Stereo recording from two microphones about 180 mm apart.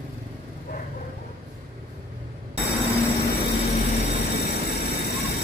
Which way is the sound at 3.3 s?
60° left (ahead or behind).